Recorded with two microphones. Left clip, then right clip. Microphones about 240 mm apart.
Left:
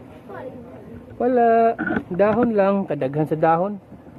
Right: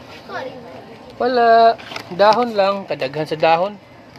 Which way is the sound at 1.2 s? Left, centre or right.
Centre.